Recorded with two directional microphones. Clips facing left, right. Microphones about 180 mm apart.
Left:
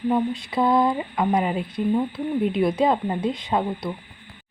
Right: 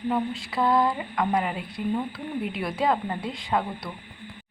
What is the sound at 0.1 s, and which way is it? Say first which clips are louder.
A woman's voice: left 4 dB; 20° left (ahead or behind).